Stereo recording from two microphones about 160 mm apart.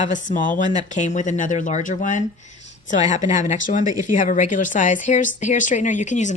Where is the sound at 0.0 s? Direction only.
55° left (ahead or behind).